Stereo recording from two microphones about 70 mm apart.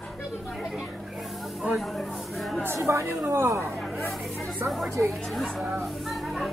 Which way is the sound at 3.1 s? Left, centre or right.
Right.